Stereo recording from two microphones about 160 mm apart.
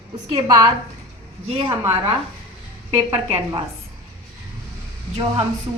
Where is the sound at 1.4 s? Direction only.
40° right (ahead or behind).